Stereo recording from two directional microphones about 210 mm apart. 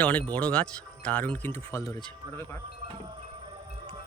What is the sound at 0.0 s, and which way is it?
Speech, 5° left (ahead or behind).